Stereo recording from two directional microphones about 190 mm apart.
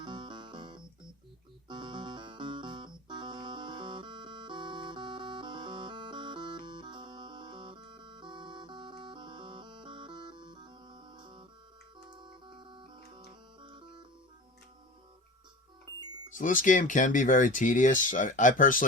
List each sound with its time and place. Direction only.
0.0 s music: 25° right (ahead or behind)
16.3 s speech: 45° left (ahead or behind)